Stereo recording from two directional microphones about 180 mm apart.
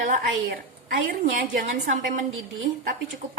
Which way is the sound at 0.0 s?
50° right (ahead or behind).